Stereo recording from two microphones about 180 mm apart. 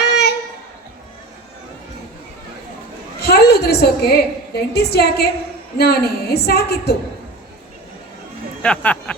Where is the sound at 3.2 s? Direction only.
60° left (ahead or behind).